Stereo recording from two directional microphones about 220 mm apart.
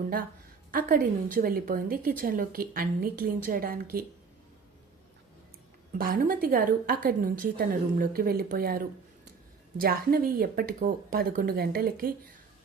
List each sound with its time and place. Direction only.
0.7 s a woman's voice: 40° right (ahead or behind)
6.0 s a woman's voice: 40° right (ahead or behind)